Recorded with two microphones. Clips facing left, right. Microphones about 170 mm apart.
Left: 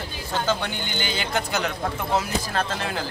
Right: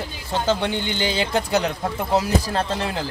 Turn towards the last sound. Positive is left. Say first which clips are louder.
# right 3 dB
turn(degrees=-25)  # may be behind; listen again after turning